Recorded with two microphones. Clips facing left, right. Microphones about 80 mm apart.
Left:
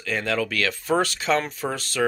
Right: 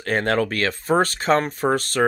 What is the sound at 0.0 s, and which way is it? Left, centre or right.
Speech, right.